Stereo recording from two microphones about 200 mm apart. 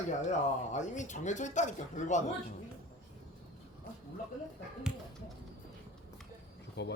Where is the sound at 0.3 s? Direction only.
35° left (ahead or behind).